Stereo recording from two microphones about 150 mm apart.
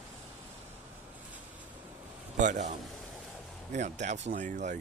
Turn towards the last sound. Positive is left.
turn(degrees=-60)  # may be behind; listen again after turning